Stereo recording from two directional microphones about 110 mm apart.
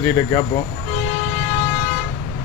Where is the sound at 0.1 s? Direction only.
30° left (ahead or behind).